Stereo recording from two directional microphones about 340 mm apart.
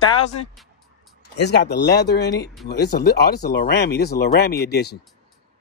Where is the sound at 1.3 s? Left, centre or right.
Left.